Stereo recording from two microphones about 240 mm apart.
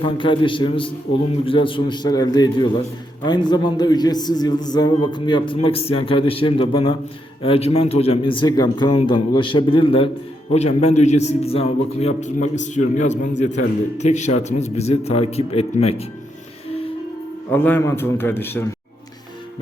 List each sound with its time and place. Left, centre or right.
0.0 s a man's voice: centre
17.5 s a man's voice: centre